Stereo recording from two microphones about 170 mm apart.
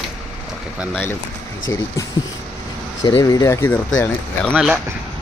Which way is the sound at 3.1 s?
20° left (ahead or behind).